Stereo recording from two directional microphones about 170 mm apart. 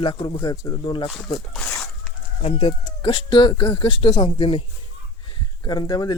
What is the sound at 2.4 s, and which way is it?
Speech, 30° left (ahead or behind).